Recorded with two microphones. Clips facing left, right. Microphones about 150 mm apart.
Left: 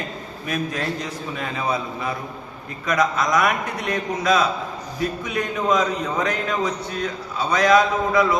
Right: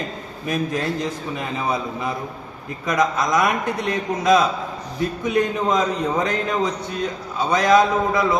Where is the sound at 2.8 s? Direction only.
20° right (ahead or behind).